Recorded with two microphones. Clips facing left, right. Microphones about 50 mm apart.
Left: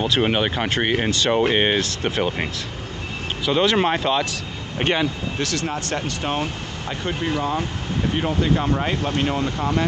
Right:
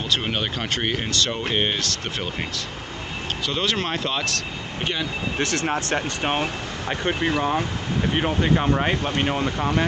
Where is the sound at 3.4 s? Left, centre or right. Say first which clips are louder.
Left 7 dB; centre.